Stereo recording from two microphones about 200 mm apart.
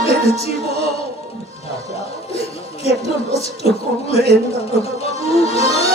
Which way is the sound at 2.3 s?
30° left (ahead or behind).